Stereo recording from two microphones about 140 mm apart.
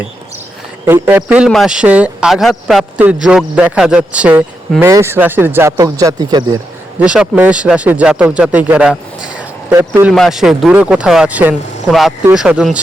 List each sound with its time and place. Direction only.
0.9 s speech: 15° right (ahead or behind)
7.0 s speech: 5° right (ahead or behind)
10.1 s speech: centre (ahead or behind)